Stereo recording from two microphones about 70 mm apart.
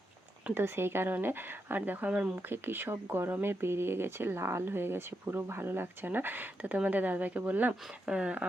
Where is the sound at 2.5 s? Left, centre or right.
Right.